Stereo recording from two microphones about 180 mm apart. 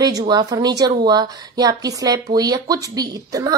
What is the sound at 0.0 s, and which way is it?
A woman's voice, 20° right (ahead or behind).